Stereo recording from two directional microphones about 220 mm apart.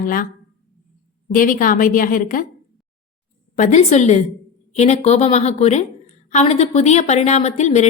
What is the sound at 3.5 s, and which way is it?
A woman's voice, 35° left (ahead or behind).